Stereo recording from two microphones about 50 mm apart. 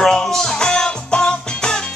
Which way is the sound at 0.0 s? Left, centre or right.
Centre.